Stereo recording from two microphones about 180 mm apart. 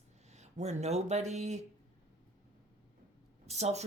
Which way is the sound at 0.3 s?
40° right (ahead or behind).